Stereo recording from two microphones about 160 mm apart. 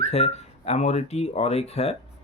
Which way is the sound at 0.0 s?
40° left (ahead or behind).